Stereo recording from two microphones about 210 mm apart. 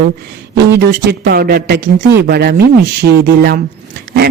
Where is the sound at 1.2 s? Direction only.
45° right (ahead or behind).